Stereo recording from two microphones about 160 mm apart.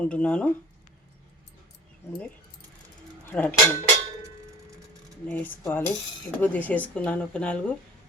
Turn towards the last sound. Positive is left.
turn(degrees=5)  # may be behind; listen again after turning